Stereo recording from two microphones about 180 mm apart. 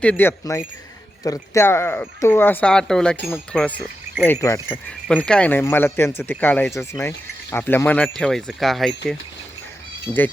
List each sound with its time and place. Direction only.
0.0 s speech: 10° left (ahead or behind)
4.3 s speech: 20° left (ahead or behind)
4.9 s speech: 5° left (ahead or behind)